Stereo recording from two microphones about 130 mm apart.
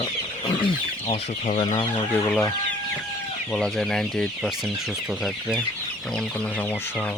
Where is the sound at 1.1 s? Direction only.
60° left (ahead or behind).